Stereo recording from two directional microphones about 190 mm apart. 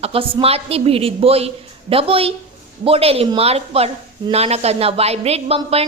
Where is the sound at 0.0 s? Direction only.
30° right (ahead or behind).